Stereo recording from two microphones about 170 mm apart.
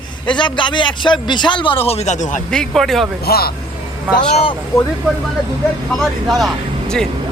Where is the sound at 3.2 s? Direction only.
65° left (ahead or behind).